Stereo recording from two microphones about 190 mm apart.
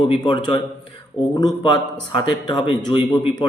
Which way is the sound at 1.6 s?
25° left (ahead or behind).